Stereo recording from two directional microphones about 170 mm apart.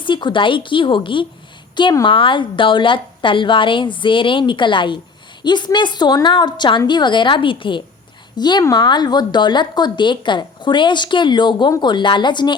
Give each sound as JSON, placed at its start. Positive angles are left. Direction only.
{"t": 0.0, "sound": "a woman's voice", "side_deg": 25}